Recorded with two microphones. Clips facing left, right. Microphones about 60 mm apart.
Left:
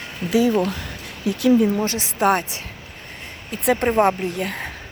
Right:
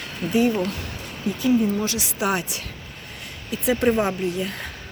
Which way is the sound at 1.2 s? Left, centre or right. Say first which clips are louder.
Left 4 dB; left.